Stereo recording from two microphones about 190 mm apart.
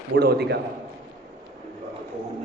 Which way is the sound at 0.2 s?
60° right (ahead or behind).